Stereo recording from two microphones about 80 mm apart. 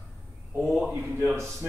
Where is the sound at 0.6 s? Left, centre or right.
Centre.